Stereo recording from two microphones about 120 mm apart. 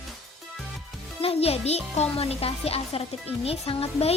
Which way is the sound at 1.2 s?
55° left (ahead or behind).